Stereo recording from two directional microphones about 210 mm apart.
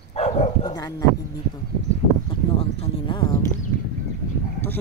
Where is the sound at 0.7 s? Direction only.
15° left (ahead or behind).